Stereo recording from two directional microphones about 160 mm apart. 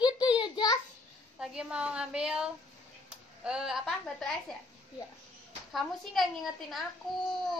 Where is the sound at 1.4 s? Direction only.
5° right (ahead or behind).